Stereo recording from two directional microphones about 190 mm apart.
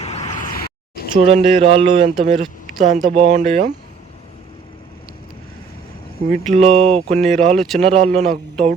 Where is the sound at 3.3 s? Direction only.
35° right (ahead or behind).